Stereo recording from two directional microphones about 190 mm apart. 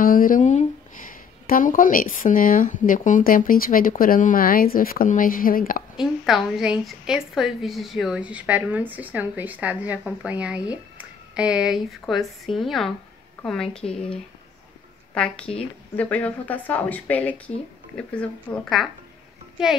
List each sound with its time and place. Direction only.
0.0 s speech: 45° left (ahead or behind)
5.9 s a woman's voice: centre (ahead or behind)